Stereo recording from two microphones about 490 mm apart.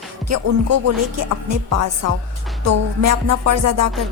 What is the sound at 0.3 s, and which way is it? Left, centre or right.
Speech, right.